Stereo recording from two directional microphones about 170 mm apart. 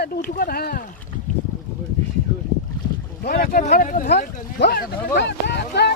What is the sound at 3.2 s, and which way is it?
Speech, 60° left (ahead or behind).